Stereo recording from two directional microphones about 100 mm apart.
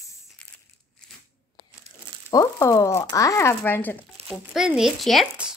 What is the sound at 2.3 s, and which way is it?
Speech, 35° left (ahead or behind).